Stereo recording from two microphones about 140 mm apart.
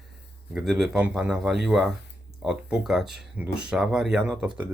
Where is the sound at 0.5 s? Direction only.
Centre (ahead or behind).